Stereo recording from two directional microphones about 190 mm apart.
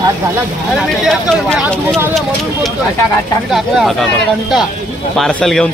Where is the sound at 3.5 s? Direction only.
Centre (ahead or behind).